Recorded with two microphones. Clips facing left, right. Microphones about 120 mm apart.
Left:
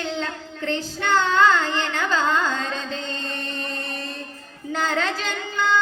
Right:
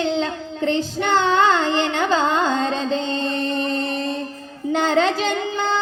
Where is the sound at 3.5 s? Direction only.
20° right (ahead or behind).